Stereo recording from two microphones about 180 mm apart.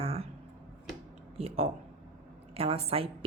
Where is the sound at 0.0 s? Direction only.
30° right (ahead or behind).